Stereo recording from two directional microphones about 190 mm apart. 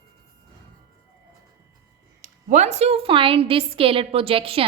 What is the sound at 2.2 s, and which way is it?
A woman's voice, 40° right (ahead or behind).